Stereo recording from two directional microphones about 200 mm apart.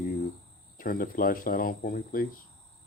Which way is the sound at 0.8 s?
45° left (ahead or behind).